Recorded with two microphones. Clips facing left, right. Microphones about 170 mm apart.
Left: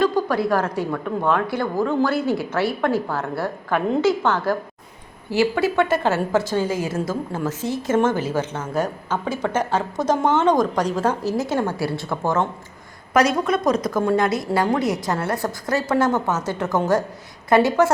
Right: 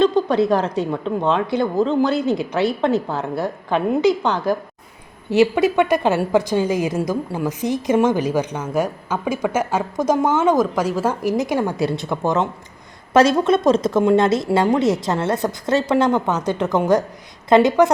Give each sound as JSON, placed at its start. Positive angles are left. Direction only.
{"t": 0.0, "sound": "a woman's voice", "side_deg": -20}